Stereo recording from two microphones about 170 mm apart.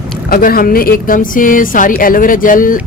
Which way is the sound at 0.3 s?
60° left (ahead or behind).